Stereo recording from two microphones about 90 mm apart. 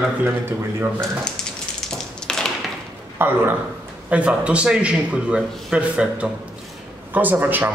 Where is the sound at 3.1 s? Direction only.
25° right (ahead or behind).